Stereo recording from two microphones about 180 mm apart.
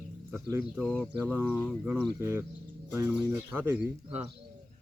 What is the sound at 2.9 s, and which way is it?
Speech, 15° right (ahead or behind).